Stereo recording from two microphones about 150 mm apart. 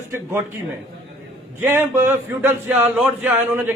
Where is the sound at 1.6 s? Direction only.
15° right (ahead or behind).